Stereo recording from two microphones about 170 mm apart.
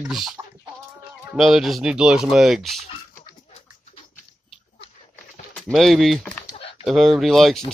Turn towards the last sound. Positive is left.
turn(degrees=0)  # may be behind; listen again after turning